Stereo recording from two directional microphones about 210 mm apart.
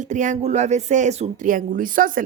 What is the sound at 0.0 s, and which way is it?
A woman's voice, 35° right (ahead or behind).